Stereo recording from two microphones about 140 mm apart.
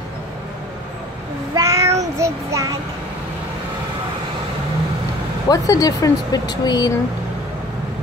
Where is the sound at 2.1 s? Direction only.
20° right (ahead or behind).